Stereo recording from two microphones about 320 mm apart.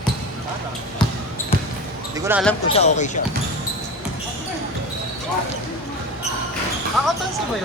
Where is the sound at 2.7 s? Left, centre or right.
Left.